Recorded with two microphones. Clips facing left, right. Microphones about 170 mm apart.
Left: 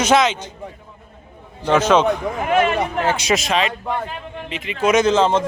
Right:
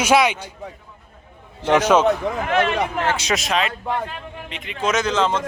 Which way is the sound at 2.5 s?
10° left (ahead or behind).